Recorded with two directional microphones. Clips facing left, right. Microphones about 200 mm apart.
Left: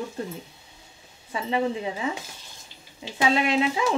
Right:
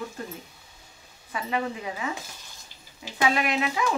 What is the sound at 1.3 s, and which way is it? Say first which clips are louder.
Speech: left 4 dB; 25° left (ahead or behind).